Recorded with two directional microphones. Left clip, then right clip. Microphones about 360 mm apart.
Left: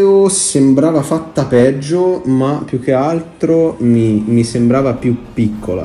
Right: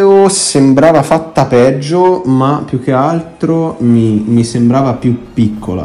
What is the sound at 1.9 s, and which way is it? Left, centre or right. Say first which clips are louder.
Mantra: right 4 dB; right.